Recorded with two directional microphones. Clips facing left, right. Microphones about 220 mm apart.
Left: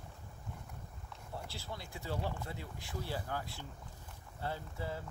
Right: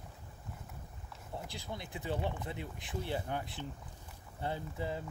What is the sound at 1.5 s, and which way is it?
Speech, 20° right (ahead or behind).